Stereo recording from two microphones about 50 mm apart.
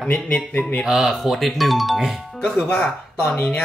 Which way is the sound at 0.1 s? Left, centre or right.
Left.